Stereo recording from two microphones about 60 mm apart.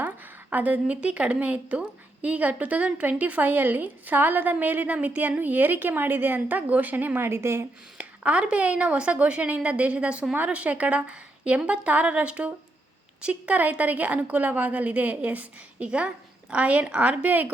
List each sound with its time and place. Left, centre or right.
0.5 s a woman's voice: right
7.3 s a woman's voice: right
7.9 s a woman's voice: right